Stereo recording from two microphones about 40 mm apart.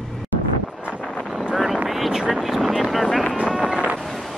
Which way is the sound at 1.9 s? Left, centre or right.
Centre.